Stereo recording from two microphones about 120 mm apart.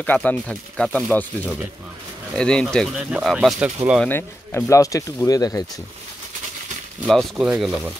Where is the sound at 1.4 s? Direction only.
10° right (ahead or behind).